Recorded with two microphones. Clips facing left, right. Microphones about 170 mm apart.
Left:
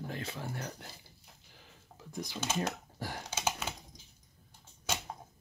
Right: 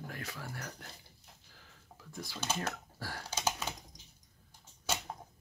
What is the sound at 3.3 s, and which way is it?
Computer keyboard, 10° right (ahead or behind).